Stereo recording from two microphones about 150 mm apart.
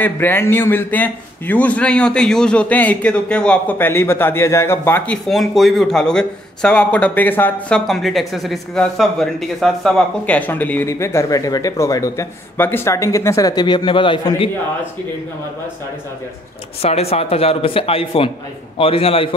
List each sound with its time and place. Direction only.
0.0 s a man's voice: 15° left (ahead or behind)
7.8 s a man's voice: centre (ahead or behind); by 14.5 s 35° left (ahead or behind)
16.8 s speech: 40° left (ahead or behind)